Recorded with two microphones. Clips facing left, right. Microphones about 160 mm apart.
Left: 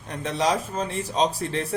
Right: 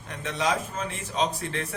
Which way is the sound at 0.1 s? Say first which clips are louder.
Left 3 dB; 35° left (ahead or behind).